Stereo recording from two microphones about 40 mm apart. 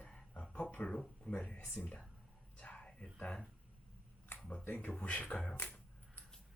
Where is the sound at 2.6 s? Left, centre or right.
Left.